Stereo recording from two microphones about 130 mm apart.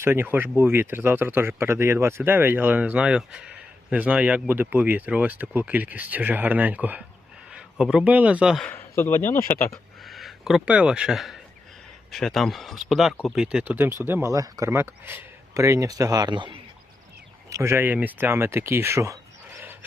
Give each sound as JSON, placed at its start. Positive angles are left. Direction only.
{"t": 0.0, "sound": "a man's voice", "side_deg": -15}
{"t": 8.7, "sound": "speech", "side_deg": 20}
{"t": 10.0, "sound": "speech", "side_deg": 0}
{"t": 17.5, "sound": "speech", "side_deg": -20}